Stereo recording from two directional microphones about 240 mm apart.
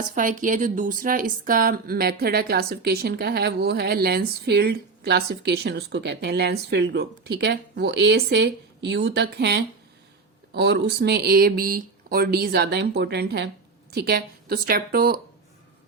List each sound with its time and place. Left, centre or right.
0.1 s speech: right